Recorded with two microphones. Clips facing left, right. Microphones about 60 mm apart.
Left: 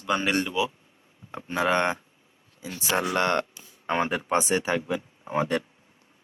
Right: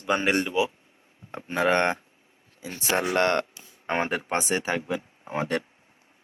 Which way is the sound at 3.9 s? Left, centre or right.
Centre.